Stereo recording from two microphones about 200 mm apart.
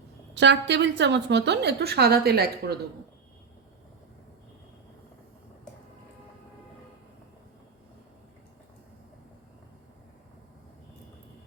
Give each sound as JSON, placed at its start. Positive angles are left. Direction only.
{"t": 0.3, "sound": "a woman's voice", "side_deg": -60}